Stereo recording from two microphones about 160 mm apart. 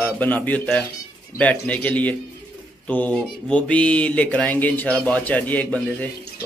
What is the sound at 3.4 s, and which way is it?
Speech, 10° left (ahead or behind).